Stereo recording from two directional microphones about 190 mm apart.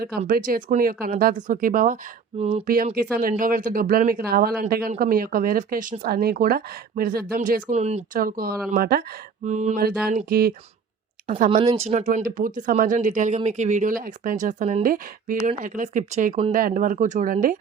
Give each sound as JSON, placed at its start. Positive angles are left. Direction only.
{"t": 0.3, "sound": "speech", "side_deg": -50}
{"t": 2.4, "sound": "speech", "side_deg": -35}
{"t": 2.6, "sound": "speech", "side_deg": -50}
{"t": 9.4, "sound": "speech", "side_deg": -40}
{"t": 9.8, "sound": "speech", "side_deg": -50}
{"t": 11.3, "sound": "speech", "side_deg": -40}